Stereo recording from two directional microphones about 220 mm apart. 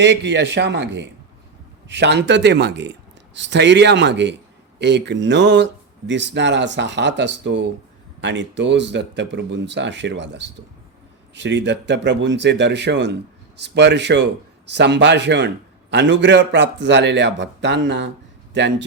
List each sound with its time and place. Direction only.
0.0 s a man's voice: 50° right (ahead or behind)